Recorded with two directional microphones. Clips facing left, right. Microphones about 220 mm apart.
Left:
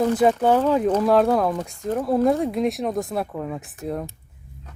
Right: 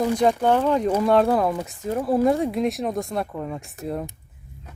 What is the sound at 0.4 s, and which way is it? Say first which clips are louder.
Speech: left 1 dB; 5° left (ahead or behind).